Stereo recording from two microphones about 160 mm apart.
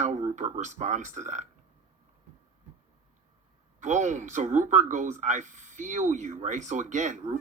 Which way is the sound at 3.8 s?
50° right (ahead or behind).